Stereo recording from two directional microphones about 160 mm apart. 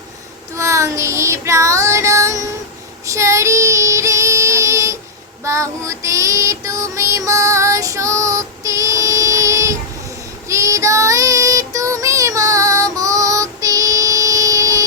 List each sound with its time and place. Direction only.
0.5 s child singing: 20° right (ahead or behind)